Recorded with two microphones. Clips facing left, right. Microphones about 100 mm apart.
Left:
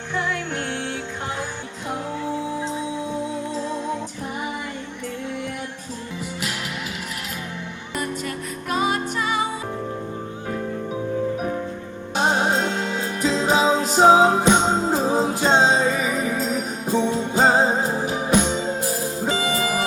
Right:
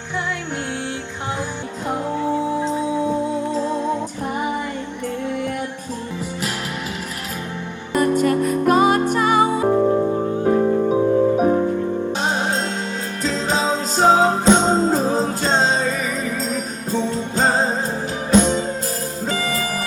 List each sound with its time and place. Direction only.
7.9 s music: 50° right (ahead or behind); by 11.7 s 35° right (ahead or behind)
12.4 s music: 15° left (ahead or behind)